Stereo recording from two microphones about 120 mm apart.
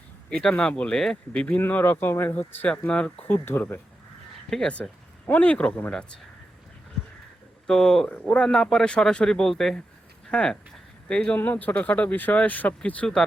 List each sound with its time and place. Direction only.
0.3 s speech: 5° left (ahead or behind)
4.4 s speech: 5° left (ahead or behind)
7.7 s speech: 5° left (ahead or behind)